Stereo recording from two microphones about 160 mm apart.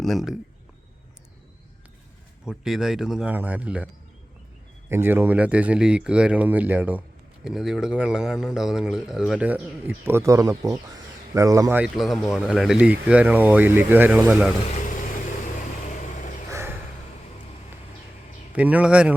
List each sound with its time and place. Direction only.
0.0 s speech: centre (ahead or behind)
2.4 s speech: 5° right (ahead or behind)
4.9 s speech: 15° right (ahead or behind)
11.8 s speech: centre (ahead or behind)
16.5 s a sound: 15° right (ahead or behind)
18.5 s speech: 10° right (ahead or behind)